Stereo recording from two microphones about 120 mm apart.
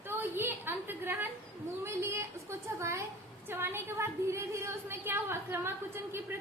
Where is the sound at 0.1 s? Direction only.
20° right (ahead or behind).